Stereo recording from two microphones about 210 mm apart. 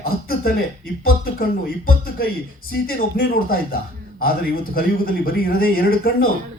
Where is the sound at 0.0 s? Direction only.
45° left (ahead or behind).